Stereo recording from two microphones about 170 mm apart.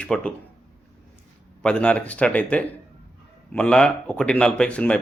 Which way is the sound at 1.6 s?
5° left (ahead or behind).